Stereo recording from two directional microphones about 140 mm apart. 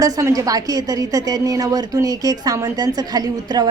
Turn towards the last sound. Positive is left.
turn(degrees=-30)  # may be behind; listen again after turning